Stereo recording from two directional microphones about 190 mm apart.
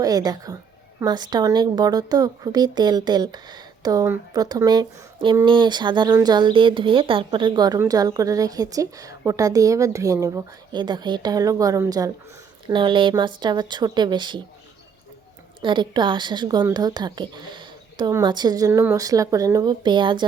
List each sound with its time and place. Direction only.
0.0 s a woman's voice: 20° right (ahead or behind)
15.6 s a woman's voice: 25° right (ahead or behind)